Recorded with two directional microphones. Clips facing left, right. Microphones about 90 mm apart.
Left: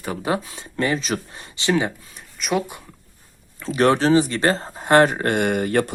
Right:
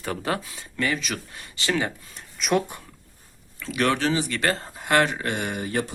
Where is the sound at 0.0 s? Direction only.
10° left (ahead or behind).